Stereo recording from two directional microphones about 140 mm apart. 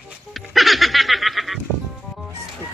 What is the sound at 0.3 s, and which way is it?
Goat, centre (ahead or behind).